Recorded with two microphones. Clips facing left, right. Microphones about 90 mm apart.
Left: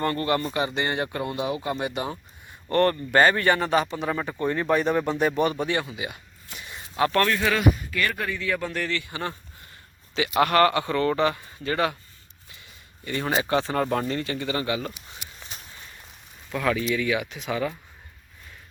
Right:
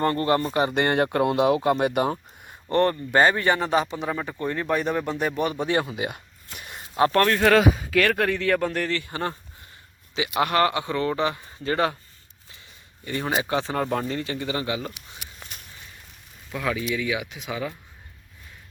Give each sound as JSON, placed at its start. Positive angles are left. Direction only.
{"t": 0.0, "sound": "speech", "side_deg": -30}
{"t": 0.6, "sound": "speech", "side_deg": -55}
{"t": 2.6, "sound": "speech", "side_deg": -20}
{"t": 4.1, "sound": "speech", "side_deg": 0}
{"t": 5.8, "sound": "speech", "side_deg": -45}
{"t": 6.6, "sound": "a sound", "side_deg": -50}
{"t": 6.9, "sound": "speech", "side_deg": -30}
{"t": 7.4, "sound": "speech", "side_deg": -80}
{"t": 10.2, "sound": "speech", "side_deg": -15}
{"t": 13.1, "sound": "speech", "side_deg": -15}
{"t": 16.5, "sound": "speech", "side_deg": -5}